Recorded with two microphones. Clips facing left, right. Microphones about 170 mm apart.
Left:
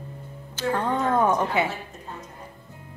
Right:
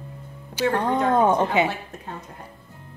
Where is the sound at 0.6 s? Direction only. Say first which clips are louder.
Right 3 dB; 10° right (ahead or behind).